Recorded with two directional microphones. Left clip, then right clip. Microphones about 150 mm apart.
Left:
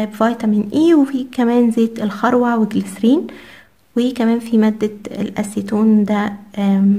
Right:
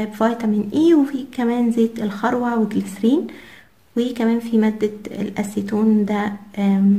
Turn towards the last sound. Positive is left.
turn(degrees=30)  # may be behind; listen again after turning